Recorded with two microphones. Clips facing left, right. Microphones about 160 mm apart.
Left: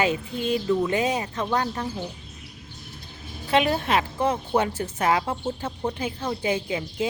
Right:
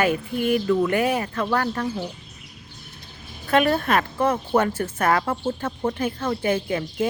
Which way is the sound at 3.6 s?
15° left (ahead or behind).